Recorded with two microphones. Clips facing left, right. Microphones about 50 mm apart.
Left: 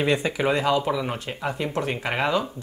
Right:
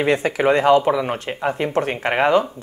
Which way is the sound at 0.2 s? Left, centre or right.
Right.